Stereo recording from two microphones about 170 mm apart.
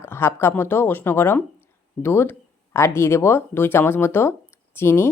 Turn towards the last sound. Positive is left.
turn(degrees=15)  # may be behind; listen again after turning